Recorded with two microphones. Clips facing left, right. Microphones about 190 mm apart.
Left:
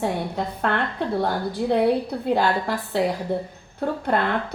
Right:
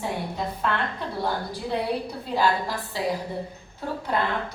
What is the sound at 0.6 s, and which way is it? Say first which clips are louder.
A woman's voice: left 5 dB; 60° left (ahead or behind).